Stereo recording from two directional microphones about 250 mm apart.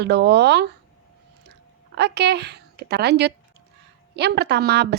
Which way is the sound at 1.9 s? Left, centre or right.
Right.